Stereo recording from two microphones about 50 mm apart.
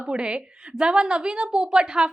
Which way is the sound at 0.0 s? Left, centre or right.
Right.